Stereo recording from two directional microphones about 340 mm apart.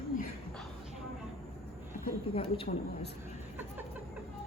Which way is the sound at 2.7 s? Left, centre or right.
Left.